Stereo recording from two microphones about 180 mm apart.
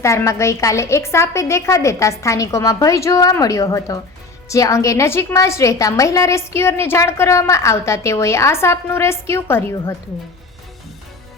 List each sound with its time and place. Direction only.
0.0 s a woman's voice: 15° left (ahead or behind)